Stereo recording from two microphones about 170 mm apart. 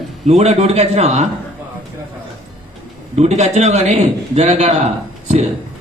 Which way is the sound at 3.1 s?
40° right (ahead or behind).